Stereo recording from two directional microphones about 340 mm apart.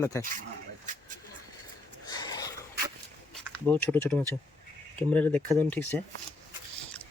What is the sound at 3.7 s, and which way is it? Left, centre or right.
Speech, centre.